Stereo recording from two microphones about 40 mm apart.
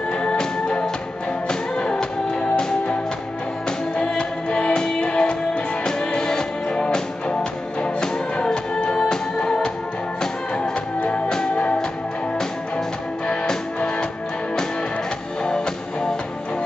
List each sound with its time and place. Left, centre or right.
0.2 s music: left
4.1 s music: left
11.1 s music: centre
15.4 s music: centre